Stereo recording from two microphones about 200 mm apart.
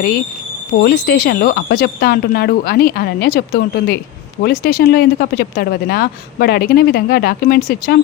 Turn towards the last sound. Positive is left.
turn(degrees=50)  # may be behind; listen again after turning